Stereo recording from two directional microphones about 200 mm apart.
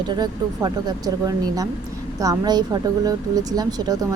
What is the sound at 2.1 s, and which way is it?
Speech, 15° right (ahead or behind).